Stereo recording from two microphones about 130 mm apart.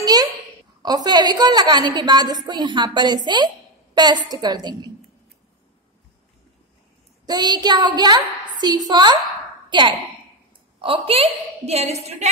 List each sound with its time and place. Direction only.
0.0 s a sound: 30° right (ahead or behind)
0.8 s a woman's voice: 30° right (ahead or behind)
7.2 s a woman's voice: 35° right (ahead or behind); by 12.0 s 55° right (ahead or behind)